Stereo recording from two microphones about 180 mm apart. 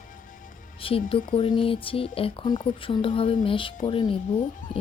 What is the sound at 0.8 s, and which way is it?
A woman's voice, 30° left (ahead or behind).